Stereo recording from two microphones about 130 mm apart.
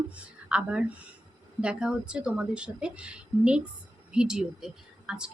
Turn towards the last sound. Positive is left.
turn(degrees=-5)  # may be behind; listen again after turning